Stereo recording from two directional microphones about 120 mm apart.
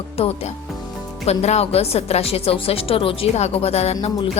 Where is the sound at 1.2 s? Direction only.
65° left (ahead or behind).